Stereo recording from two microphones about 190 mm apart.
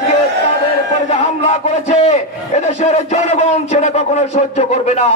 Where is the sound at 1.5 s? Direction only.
35° left (ahead or behind).